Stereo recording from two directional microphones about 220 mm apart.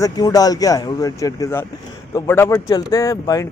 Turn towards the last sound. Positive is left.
turn(degrees=15)  # may be behind; listen again after turning